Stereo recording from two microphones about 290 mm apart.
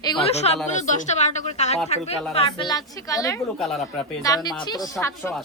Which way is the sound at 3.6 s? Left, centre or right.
Centre.